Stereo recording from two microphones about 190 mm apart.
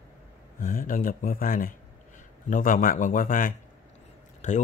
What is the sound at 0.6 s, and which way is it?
Speech, 45° left (ahead or behind).